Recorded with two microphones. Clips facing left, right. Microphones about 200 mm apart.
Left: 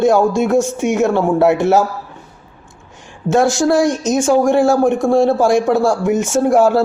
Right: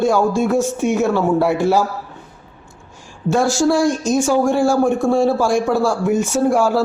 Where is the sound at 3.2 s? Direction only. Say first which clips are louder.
Left 2 dB; 20° left (ahead or behind).